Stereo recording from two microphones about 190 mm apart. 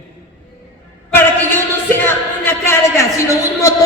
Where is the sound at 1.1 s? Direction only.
10° left (ahead or behind).